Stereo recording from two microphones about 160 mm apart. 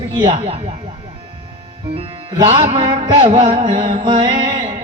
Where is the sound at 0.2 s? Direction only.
35° right (ahead or behind).